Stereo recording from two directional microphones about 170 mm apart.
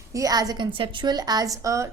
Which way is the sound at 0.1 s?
20° right (ahead or behind).